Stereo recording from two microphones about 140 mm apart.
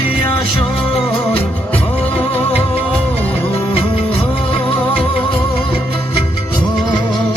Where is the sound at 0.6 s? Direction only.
40° left (ahead or behind).